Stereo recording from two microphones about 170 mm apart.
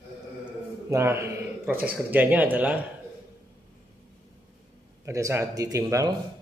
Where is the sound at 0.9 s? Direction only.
15° right (ahead or behind).